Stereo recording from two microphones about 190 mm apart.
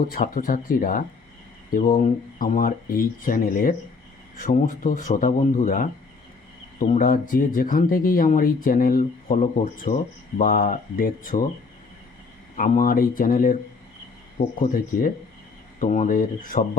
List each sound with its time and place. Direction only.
0.0 s speech: 50° left (ahead or behind)
12.5 s speech: 45° left (ahead or behind)
14.6 s speech: 45° left (ahead or behind)